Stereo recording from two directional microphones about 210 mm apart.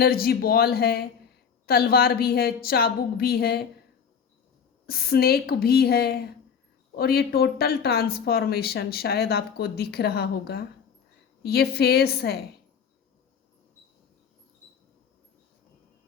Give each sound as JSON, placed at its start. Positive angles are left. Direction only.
{"t": 0.0, "sound": "speech", "side_deg": 45}
{"t": 4.9, "sound": "speech", "side_deg": 45}